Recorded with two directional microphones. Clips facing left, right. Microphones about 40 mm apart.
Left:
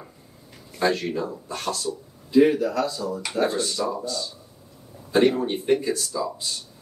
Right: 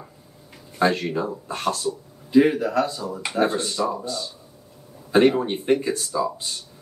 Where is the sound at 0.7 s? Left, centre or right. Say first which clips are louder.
Right 2 dB; right.